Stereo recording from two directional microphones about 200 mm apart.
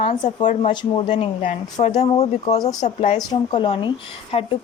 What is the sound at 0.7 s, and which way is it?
A woman's voice, 20° left (ahead or behind).